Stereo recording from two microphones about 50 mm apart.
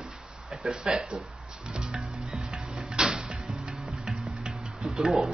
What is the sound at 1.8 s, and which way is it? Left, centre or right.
Music, centre.